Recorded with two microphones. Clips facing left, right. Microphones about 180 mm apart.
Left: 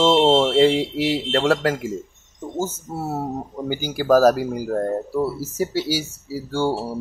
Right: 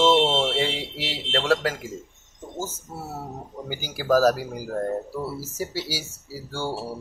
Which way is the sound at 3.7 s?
60° left (ahead or behind).